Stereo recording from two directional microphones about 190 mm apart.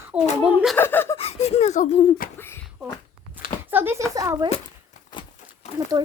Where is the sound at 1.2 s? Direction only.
35° left (ahead or behind).